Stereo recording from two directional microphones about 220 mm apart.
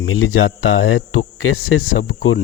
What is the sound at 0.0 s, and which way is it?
Speech, 70° left (ahead or behind).